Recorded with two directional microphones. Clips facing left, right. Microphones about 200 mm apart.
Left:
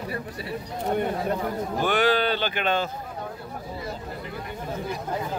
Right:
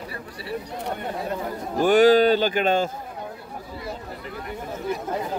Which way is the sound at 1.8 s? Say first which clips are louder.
Right 8 dB; 40° right (ahead or behind).